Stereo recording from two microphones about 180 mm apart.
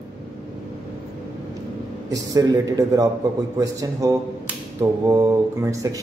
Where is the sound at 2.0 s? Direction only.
20° right (ahead or behind).